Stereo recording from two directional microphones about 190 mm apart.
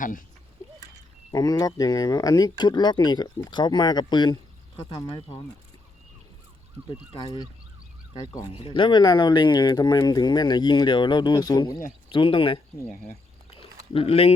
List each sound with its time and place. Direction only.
1.3 s speech: 20° left (ahead or behind)
7.1 s speech: 25° left (ahead or behind)
13.9 s speech: 30° left (ahead or behind)